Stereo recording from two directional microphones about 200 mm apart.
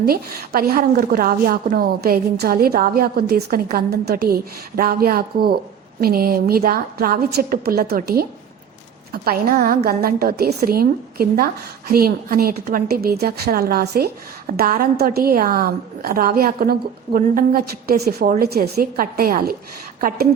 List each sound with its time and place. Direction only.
0.0 s a woman's voice: 50° right (ahead or behind)